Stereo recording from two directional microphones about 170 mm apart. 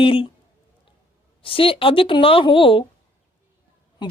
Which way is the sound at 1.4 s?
30° left (ahead or behind).